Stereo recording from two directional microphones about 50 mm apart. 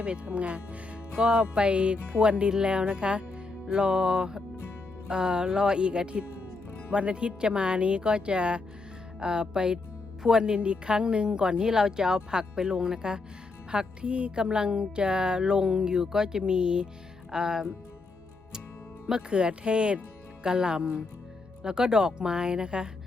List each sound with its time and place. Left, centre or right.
0.0 s speech: right
19.0 s speech: centre